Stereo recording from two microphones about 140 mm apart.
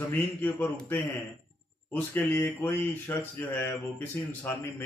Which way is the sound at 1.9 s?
15° left (ahead or behind).